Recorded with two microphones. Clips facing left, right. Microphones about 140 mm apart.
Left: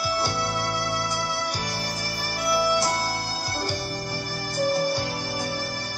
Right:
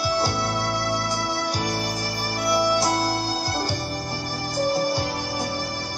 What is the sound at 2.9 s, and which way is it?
Music, 30° right (ahead or behind).